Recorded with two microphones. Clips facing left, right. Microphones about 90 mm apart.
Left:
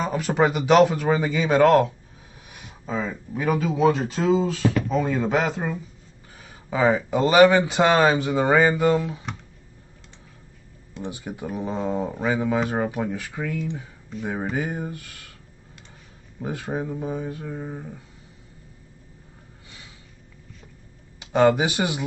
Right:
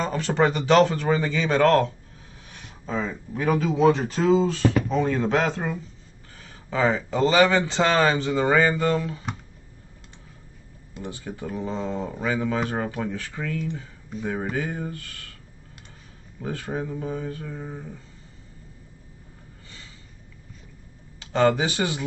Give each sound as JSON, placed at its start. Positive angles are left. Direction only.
{"t": 0.0, "sound": "speech", "side_deg": 10}
{"t": 11.1, "sound": "speech", "side_deg": 15}
{"t": 14.5, "sound": "speech", "side_deg": 15}
{"t": 16.3, "sound": "speech", "side_deg": 15}
{"t": 21.2, "sound": "speech", "side_deg": 15}